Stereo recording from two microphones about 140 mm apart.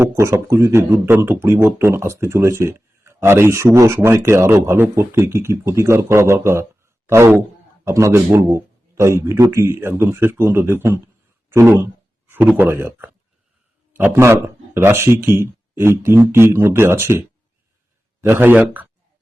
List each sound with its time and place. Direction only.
0.0 s speech: 20° right (ahead or behind)